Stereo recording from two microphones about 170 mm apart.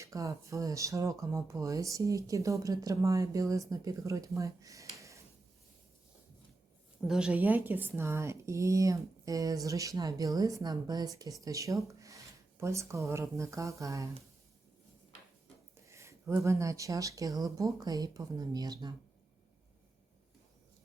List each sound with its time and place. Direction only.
0.0 s speech: 20° right (ahead or behind)
7.1 s speech: 5° right (ahead or behind)
15.9 s speech: 15° right (ahead or behind)